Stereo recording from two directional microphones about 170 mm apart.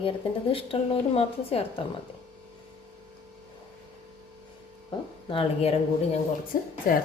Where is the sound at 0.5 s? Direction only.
35° left (ahead or behind).